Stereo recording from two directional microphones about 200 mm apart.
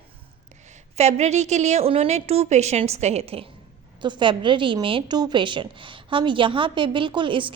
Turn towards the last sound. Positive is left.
turn(degrees=-25)  # may be behind; listen again after turning